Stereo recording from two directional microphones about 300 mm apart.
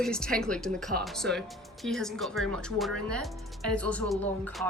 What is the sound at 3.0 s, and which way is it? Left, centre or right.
Speech, right.